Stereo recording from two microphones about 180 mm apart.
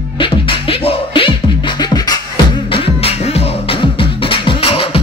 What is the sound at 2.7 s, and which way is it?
Music, 30° left (ahead or behind).